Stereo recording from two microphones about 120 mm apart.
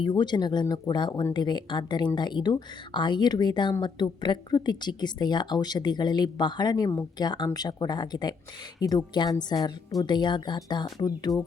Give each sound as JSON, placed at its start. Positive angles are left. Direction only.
{"t": 0.0, "sound": "speech", "side_deg": 40}